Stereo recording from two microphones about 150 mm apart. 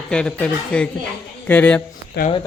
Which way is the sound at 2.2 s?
90° left.